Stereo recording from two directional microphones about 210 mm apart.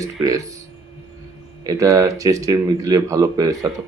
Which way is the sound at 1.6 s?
15° right (ahead or behind).